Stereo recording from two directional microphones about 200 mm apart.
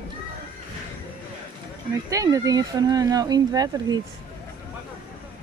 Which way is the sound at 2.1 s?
15° right (ahead or behind).